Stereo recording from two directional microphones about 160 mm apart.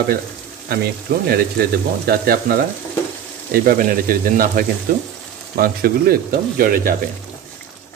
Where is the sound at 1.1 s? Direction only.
90° right.